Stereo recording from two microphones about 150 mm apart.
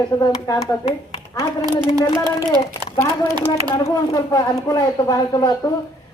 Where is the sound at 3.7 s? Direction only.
25° left (ahead or behind).